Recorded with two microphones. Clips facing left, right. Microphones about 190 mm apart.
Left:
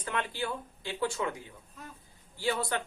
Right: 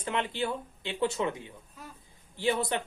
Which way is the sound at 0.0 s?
20° right (ahead or behind).